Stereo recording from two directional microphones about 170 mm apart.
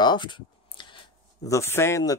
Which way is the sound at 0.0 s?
25° left (ahead or behind).